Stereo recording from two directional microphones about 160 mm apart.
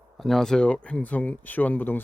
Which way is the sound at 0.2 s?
Centre (ahead or behind).